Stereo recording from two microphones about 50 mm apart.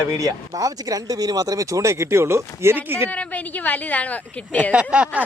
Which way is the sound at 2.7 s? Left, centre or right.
Right.